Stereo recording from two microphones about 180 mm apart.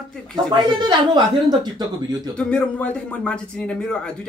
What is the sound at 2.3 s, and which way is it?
A man's voice, 5° left (ahead or behind).